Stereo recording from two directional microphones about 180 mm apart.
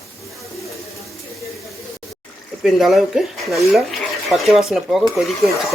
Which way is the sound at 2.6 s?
Centre (ahead or behind).